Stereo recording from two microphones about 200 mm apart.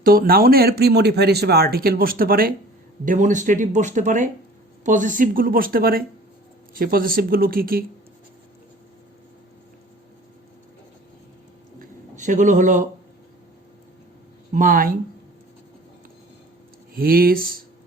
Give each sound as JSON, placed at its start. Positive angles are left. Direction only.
{"t": 0.0, "sound": "a man's voice", "side_deg": -45}
{"t": 11.8, "sound": "a sound", "side_deg": -40}
{"t": 14.5, "sound": "a man's voice", "side_deg": -45}
{"t": 16.9, "sound": "a man's voice", "side_deg": -50}